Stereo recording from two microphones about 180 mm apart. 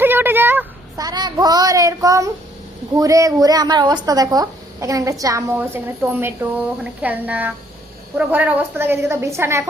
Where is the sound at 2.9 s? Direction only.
20° right (ahead or behind).